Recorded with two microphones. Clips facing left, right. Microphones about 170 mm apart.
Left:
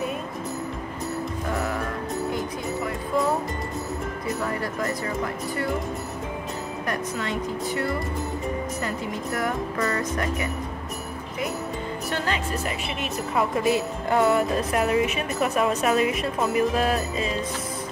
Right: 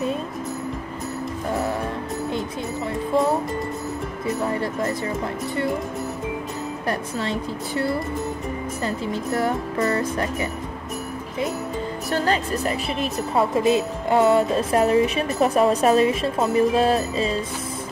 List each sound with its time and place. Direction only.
4.5 s speech: 25° right (ahead or behind)
6.9 s a woman's voice: 30° right (ahead or behind)
12.1 s speech: 35° right (ahead or behind)